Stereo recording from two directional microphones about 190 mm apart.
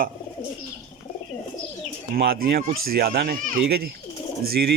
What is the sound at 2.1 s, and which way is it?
Speech, 55° right (ahead or behind).